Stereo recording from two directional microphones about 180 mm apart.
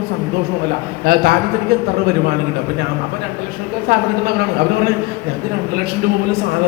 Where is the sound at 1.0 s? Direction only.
60° right (ahead or behind).